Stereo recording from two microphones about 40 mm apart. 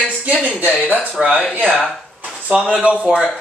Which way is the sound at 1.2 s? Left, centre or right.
Right.